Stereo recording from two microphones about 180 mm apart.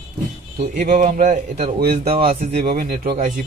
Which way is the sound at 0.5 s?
60° right (ahead or behind).